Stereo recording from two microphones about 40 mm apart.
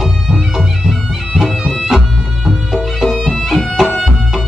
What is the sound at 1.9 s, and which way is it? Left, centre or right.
Music, centre.